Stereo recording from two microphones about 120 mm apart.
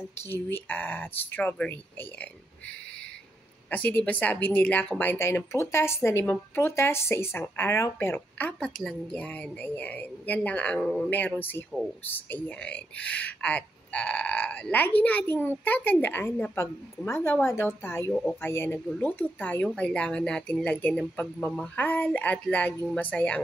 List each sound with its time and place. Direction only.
0.3 s speech: 15° left (ahead or behind)
3.7 s speech: 10° left (ahead or behind)